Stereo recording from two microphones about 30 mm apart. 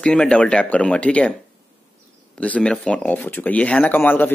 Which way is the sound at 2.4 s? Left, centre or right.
Left.